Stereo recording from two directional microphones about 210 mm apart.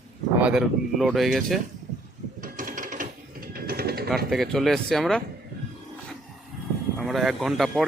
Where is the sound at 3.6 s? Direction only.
45° right (ahead or behind).